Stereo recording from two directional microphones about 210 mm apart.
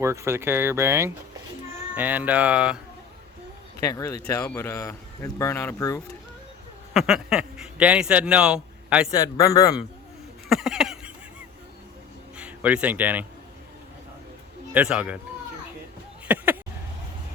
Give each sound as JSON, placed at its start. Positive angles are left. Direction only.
{"t": 0.0, "sound": "speech", "side_deg": -15}
{"t": 3.8, "sound": "a man's voice", "side_deg": 15}
{"t": 6.9, "sound": "speech", "side_deg": 0}
{"t": 9.1, "sound": "a man's voice", "side_deg": 15}
{"t": 10.5, "sound": "a sound", "side_deg": 0}
{"t": 12.4, "sound": "a man's voice", "side_deg": -5}
{"t": 14.7, "sound": "speech", "side_deg": -5}
{"t": 16.2, "sound": "a sound", "side_deg": -10}